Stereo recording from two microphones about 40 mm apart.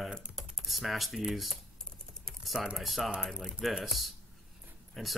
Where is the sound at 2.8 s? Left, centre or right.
Centre.